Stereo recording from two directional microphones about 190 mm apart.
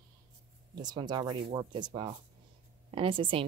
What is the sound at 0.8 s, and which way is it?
Speech, 20° right (ahead or behind).